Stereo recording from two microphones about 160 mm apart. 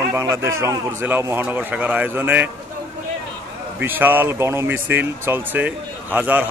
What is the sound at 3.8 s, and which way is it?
A man's voice, 10° right (ahead or behind).